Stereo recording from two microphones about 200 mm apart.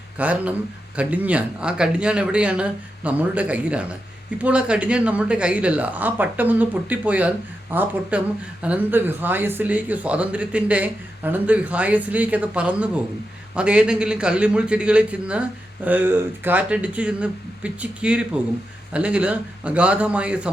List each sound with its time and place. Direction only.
0.2 s a man's voice: 5° right (ahead or behind)